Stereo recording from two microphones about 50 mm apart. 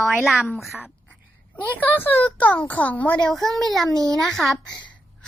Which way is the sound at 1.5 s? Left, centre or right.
Left.